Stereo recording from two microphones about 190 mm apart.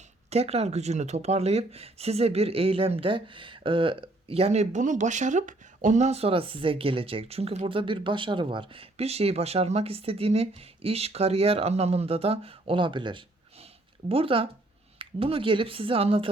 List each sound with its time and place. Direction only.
0.3 s speech: 35° right (ahead or behind)